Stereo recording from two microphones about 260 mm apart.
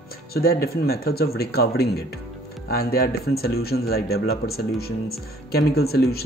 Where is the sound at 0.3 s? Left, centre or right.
Left.